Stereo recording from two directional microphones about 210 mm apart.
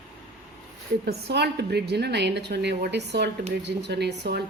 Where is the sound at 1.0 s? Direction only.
50° right (ahead or behind).